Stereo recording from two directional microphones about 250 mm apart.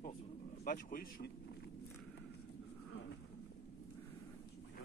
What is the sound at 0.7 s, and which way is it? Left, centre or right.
Speech, left.